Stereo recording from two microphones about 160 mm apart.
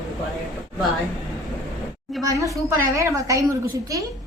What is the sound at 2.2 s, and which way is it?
A woman's voice, 20° right (ahead or behind).